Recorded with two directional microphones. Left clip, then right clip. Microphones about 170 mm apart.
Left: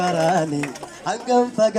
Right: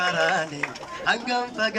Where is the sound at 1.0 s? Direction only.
40° left (ahead or behind).